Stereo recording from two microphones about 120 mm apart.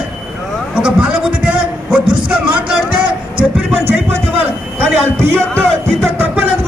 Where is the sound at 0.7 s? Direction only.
10° right (ahead or behind).